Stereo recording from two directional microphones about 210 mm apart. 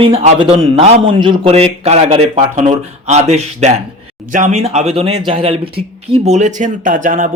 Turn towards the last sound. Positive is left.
turn(degrees=-40)  # may be behind; listen again after turning